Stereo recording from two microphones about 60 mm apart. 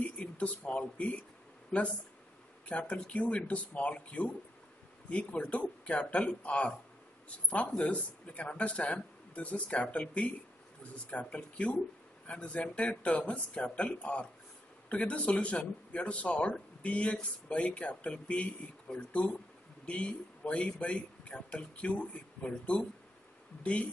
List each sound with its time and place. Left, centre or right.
0.0 s speech: left
2.7 s speech: centre